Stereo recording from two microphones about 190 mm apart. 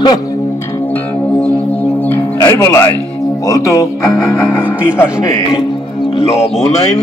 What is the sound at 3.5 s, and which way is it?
Speech, 15° left (ahead or behind).